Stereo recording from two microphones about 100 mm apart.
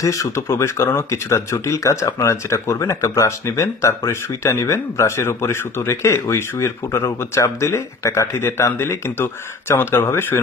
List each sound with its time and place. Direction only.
0.0 s speech: 35° left (ahead or behind)